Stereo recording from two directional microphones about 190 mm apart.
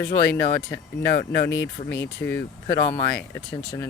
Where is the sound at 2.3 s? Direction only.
15° left (ahead or behind).